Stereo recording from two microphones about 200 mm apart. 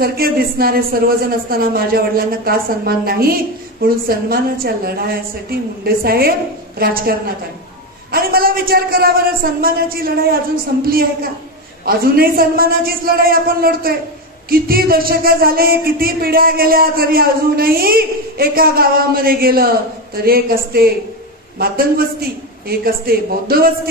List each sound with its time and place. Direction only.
0.0 s a man's voice: 50° right (ahead or behind)
11.8 s a man's voice: 50° right (ahead or behind)